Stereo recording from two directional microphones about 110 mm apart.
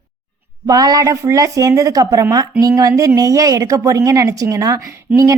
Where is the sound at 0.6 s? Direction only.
35° right (ahead or behind).